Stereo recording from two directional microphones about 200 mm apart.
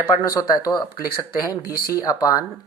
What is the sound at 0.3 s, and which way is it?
Speech, 15° left (ahead or behind).